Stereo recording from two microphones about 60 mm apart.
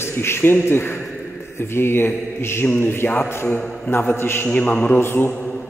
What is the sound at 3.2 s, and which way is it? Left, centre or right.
Mantra, left.